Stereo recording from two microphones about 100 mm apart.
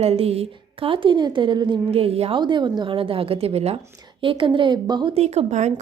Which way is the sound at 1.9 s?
80° right.